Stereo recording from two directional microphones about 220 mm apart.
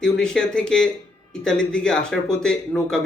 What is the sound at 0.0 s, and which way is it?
Speech, 5° left (ahead or behind).